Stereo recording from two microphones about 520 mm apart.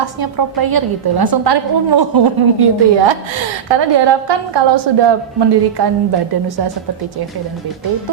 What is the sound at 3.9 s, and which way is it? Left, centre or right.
A woman's voice, right.